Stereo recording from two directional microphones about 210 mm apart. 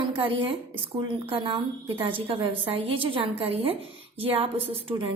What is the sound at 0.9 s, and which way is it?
A woman's voice, 25° right (ahead or behind).